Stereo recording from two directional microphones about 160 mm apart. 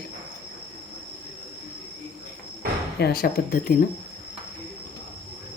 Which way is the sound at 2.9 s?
85° left.